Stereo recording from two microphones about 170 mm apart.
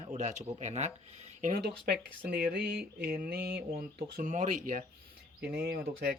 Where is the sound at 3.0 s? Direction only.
60° right (ahead or behind).